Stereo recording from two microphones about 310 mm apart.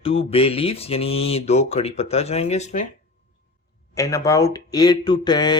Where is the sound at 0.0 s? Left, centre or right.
Centre.